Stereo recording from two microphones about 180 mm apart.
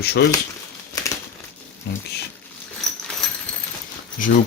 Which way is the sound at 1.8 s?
65° left (ahead or behind).